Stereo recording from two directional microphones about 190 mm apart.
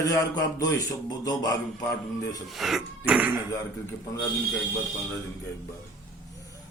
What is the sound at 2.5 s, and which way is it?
Speech, centre (ahead or behind).